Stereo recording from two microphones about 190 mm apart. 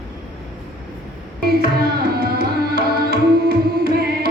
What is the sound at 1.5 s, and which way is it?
Tabla, 55° right (ahead or behind).